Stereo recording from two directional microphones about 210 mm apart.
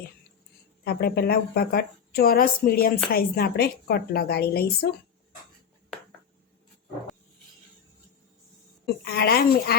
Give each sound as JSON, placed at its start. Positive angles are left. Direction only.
{"t": 0.9, "sound": "speech", "side_deg": 50}
{"t": 9.0, "sound": "speech", "side_deg": 45}